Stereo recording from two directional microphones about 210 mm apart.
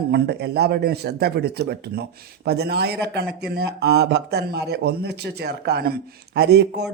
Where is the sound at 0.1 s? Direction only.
50° right (ahead or behind).